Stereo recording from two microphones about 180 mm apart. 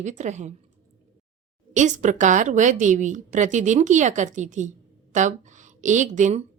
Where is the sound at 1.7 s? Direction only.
45° right (ahead or behind).